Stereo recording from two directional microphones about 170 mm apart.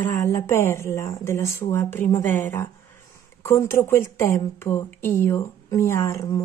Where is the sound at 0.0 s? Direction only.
15° left (ahead or behind).